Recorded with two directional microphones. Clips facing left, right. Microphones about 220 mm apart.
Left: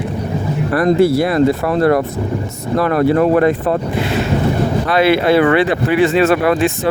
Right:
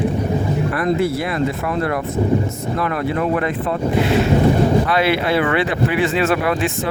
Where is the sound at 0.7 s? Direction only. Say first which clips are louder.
Left 9 dB; 40° left (ahead or behind).